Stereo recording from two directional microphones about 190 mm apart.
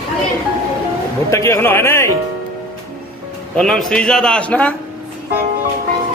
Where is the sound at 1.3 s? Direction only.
15° left (ahead or behind).